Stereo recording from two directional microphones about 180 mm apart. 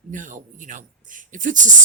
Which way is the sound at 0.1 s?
45° right (ahead or behind).